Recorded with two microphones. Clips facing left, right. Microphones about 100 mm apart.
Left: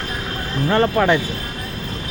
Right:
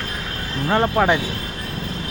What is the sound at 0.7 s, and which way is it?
Speech, 10° right (ahead or behind).